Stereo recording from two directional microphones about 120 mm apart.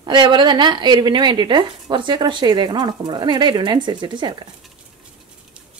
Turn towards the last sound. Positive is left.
turn(degrees=-40)  # may be behind; listen again after turning